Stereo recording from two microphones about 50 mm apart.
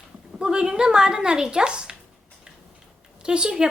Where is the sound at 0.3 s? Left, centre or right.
Centre.